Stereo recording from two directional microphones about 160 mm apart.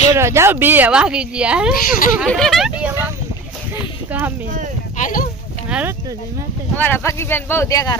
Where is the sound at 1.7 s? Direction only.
60° left (ahead or behind).